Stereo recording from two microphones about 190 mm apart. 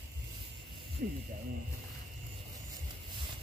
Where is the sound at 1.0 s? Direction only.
55° right (ahead or behind).